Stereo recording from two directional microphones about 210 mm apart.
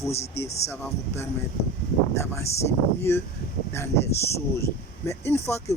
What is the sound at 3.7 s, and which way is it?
Speech, 10° left (ahead or behind).